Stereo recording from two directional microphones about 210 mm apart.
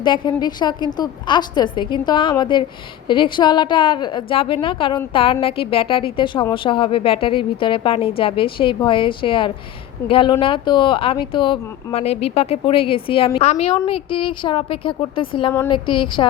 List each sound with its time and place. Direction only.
0.0 s speech: 20° left (ahead or behind)